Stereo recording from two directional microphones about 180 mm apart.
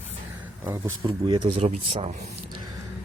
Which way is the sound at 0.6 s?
15° right (ahead or behind).